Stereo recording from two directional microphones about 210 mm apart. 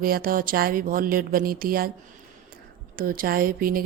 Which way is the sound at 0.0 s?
45° right (ahead or behind).